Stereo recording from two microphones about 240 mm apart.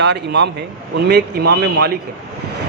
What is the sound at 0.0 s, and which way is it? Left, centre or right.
A man's voice, right.